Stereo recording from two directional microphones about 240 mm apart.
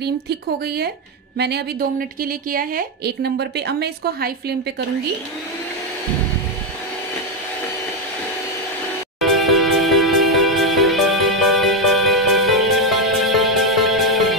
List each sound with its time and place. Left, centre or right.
0.0 s a woman's voice: right
9.2 s music: centre